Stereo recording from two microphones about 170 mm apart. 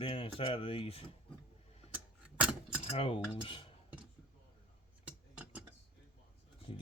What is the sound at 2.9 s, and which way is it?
Speech, 35° left (ahead or behind).